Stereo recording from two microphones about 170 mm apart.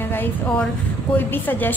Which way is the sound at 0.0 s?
10° left (ahead or behind).